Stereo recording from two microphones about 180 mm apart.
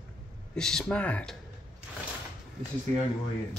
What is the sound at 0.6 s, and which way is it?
Speech, 5° left (ahead or behind).